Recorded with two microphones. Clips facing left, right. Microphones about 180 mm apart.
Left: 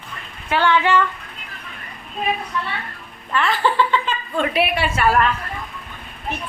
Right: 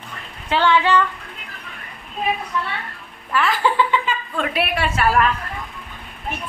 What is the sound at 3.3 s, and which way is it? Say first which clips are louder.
A woman's voice: even; 5° right (ahead or behind).